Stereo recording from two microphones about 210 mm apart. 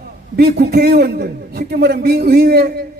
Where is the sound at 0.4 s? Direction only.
50° right (ahead or behind).